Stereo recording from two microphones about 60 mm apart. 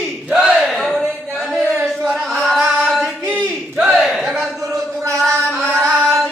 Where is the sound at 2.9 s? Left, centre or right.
Centre.